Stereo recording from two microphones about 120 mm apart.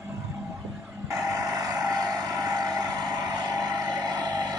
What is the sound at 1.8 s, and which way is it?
Vehicle, 30° right (ahead or behind).